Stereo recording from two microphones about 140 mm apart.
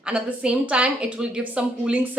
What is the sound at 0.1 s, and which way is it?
A woman's voice, 10° right (ahead or behind).